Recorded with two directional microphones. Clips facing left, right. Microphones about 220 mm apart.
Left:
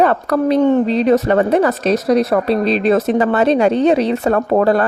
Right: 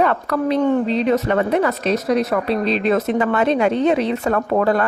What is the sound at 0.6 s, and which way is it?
Speech, 25° left (ahead or behind).